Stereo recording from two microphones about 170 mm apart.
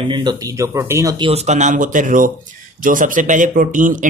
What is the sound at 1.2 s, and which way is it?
Speech, 40° right (ahead or behind).